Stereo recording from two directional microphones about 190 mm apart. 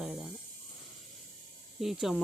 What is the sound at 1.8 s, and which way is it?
Speech, centre (ahead or behind).